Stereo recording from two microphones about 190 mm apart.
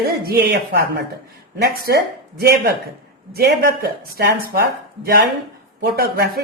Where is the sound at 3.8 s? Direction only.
55° right (ahead or behind).